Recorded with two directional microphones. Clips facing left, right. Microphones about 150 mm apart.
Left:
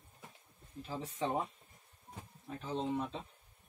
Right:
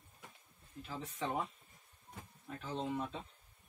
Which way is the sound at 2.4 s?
20° left (ahead or behind).